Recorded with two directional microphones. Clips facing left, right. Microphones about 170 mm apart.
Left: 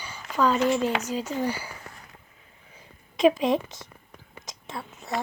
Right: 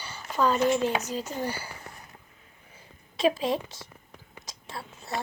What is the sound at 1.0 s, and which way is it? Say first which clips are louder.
Speech: left 4 dB; 10° left (ahead or behind).